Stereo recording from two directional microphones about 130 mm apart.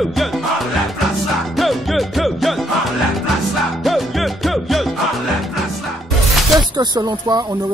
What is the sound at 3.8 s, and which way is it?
Music, centre (ahead or behind).